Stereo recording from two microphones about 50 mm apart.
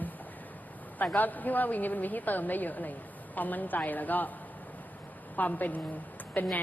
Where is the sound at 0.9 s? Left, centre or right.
Left.